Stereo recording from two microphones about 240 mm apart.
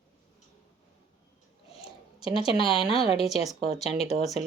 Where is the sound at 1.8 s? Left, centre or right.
Left.